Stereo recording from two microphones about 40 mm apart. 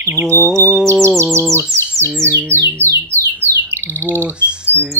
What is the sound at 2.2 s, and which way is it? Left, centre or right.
Bird, right.